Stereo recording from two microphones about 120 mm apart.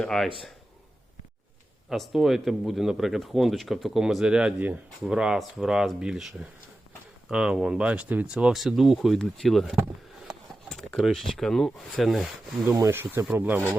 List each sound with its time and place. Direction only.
0.0 s speech: 5° left (ahead or behind)
1.9 s speech: 5° right (ahead or behind)
12.9 s speech: 20° right (ahead or behind)